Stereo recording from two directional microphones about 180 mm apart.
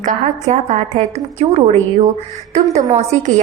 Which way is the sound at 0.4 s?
40° right (ahead or behind).